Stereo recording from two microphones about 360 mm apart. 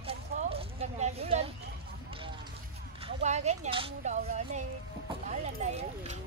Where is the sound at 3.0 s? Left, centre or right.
Centre.